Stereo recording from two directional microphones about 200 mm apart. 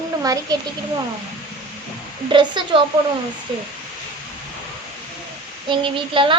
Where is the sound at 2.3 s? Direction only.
25° right (ahead or behind).